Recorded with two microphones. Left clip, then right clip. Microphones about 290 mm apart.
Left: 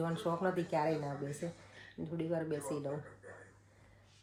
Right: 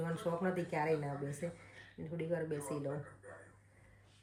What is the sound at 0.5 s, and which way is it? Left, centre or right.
Speech, centre.